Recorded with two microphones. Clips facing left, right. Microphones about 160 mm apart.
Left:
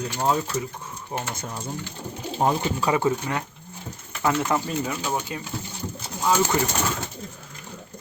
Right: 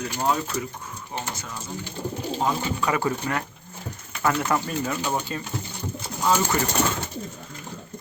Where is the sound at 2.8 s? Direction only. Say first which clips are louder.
Left 2 dB; 25° left (ahead or behind).